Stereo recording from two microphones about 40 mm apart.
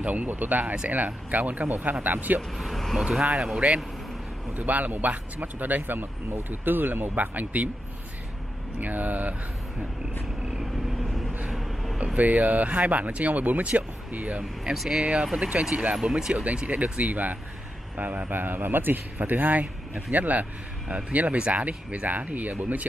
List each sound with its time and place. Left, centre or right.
0.0 s speech: right
2.5 s speech: centre
3.6 s speech: right
4.6 s speech: right
8.7 s speech: right
10.6 s vehicle: centre
11.5 s a sound: centre
12.2 s speech: right
14.6 s speech: centre
15.0 s speech: right
15.9 s speech: centre
16.5 s speech: right
18.3 s speech: right